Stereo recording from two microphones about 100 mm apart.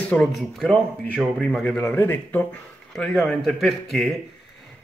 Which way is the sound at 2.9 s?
5° left (ahead or behind).